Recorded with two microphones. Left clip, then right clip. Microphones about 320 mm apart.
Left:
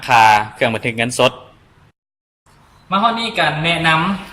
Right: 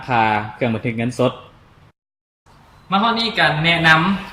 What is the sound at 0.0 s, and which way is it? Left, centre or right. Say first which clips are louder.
Speech: left 7 dB; left.